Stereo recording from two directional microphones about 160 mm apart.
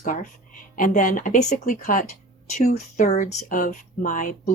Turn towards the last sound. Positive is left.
turn(degrees=55)  # may be behind; listen again after turning